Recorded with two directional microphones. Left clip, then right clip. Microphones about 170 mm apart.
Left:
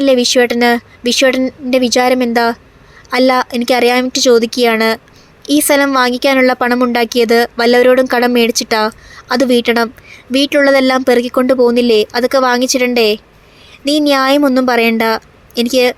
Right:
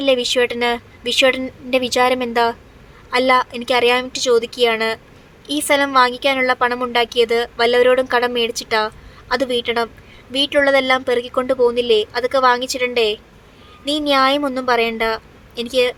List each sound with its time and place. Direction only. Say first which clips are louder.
0.0 s a woman's voice: left 6 dB; 25° left (ahead or behind)